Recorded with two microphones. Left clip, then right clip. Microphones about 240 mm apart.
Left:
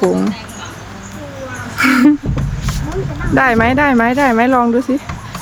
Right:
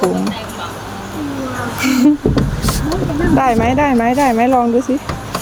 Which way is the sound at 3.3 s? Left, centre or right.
Centre.